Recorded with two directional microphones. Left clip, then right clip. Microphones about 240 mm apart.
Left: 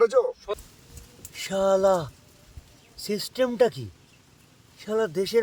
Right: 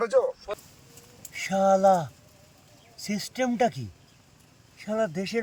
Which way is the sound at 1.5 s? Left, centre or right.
Centre.